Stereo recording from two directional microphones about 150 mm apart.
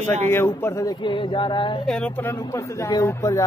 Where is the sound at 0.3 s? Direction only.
15° left (ahead or behind); by 1.9 s 35° left (ahead or behind).